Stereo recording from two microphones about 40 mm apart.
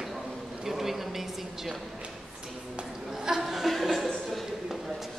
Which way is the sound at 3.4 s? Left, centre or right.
Centre.